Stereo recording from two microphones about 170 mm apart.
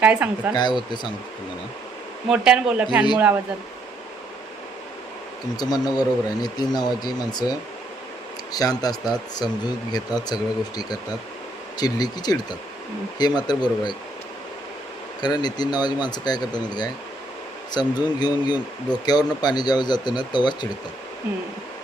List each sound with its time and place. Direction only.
0.0 s speech: 5° right (ahead or behind)
0.5 s speech: 25° left (ahead or behind)
2.3 s a man's voice: 5° right (ahead or behind)
5.5 s speech: 25° left (ahead or behind)
8.5 s speech: 20° left (ahead or behind)
15.2 s speech: 25° left (ahead or behind)